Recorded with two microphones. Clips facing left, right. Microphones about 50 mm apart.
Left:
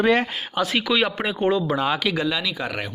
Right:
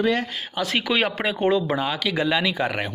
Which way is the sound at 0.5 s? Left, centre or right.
Centre.